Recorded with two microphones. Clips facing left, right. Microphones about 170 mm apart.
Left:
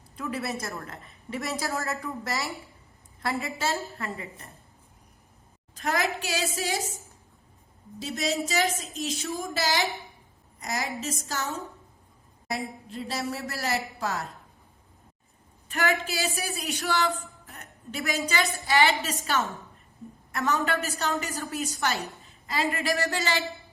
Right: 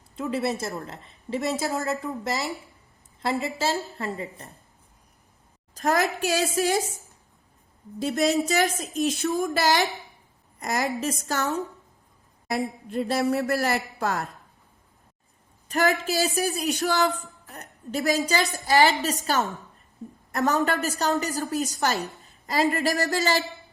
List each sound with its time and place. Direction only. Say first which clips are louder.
0.2 s a woman's voice: right 5 dB; 25° right (ahead or behind)
5.7 s a woman's voice: right 4 dB; 40° right (ahead or behind)
7.9 s a woman's voice: right 7 dB; 55° right (ahead or behind)
12.9 s a woman's voice: right 9 dB; 55° right (ahead or behind)
15.7 s a woman's voice: right 4 dB; 40° right (ahead or behind)